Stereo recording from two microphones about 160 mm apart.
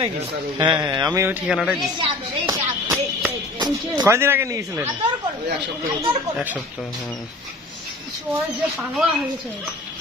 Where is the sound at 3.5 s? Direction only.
25° right (ahead or behind).